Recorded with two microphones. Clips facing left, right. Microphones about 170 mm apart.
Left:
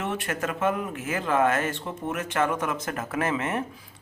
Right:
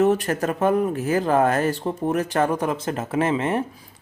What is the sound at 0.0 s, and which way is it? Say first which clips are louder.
Speech: right 10 dB; 40° right (ahead or behind).